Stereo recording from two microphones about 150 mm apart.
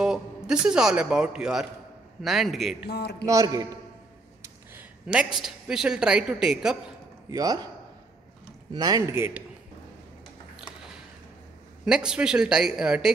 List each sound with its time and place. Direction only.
0.0 s speech: 5° right (ahead or behind)
2.9 s speech: 90° left
3.3 s speech: 25° right (ahead or behind)
4.4 s speech: 10° right (ahead or behind)
7.2 s speech: 25° right (ahead or behind)
8.7 s speech: 25° right (ahead or behind)
11.8 s speech: 5° right (ahead or behind)